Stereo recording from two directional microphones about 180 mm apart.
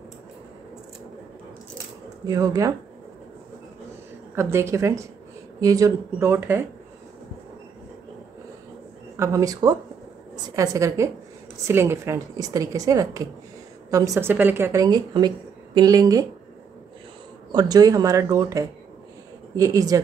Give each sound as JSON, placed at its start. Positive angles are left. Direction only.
{"t": 2.2, "sound": "speech", "side_deg": -20}
{"t": 4.4, "sound": "a woman's voice", "side_deg": -15}
{"t": 9.1, "sound": "a woman's voice", "side_deg": -15}
{"t": 17.5, "sound": "speech", "side_deg": -20}